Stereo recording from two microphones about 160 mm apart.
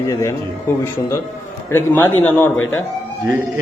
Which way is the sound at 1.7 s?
15° left (ahead or behind).